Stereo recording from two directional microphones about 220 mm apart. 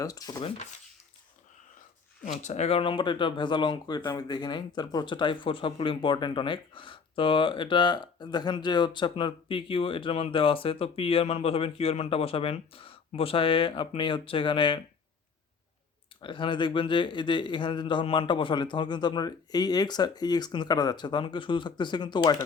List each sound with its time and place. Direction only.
0.0 s speech: 15° left (ahead or behind)
2.2 s speech: 30° left (ahead or behind)
16.2 s speech: 20° left (ahead or behind)